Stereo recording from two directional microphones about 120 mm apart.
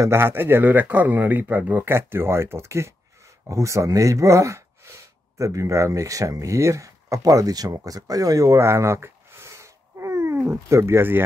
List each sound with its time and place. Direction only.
0.0 s speech: 20° right (ahead or behind)